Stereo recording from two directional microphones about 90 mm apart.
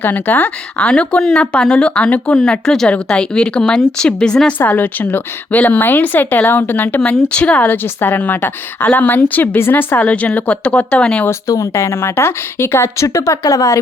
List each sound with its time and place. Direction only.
0.0 s speech: 20° left (ahead or behind)
4.5 s speech: 20° left (ahead or behind)
11.3 s speech: 40° left (ahead or behind)